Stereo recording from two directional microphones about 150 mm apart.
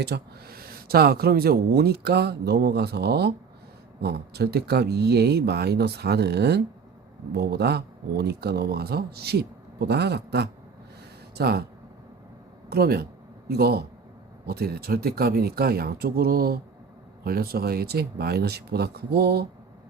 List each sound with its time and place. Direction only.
0.0 s speech: 90° right
12.7 s speech: 90° right